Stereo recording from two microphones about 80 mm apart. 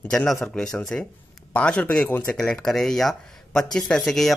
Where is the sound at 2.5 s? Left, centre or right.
Centre.